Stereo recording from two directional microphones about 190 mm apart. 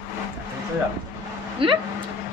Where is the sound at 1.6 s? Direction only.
30° right (ahead or behind).